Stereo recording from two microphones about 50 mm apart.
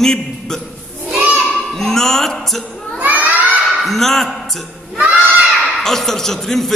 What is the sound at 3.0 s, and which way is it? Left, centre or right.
Children shouting, right.